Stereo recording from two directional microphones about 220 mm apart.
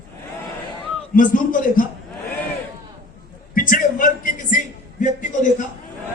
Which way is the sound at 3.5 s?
40° left (ahead or behind).